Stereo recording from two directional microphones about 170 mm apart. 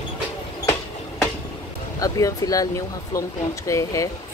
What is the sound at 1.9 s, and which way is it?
Speech, 20° left (ahead or behind).